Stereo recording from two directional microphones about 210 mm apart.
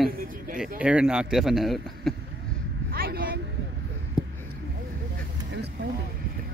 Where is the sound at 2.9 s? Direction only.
45° right (ahead or behind).